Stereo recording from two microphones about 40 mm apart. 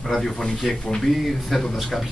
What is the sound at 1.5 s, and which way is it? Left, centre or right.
Speech, centre.